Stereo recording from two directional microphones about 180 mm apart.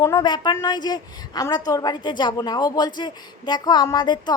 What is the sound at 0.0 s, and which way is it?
A woman's voice, 20° left (ahead or behind).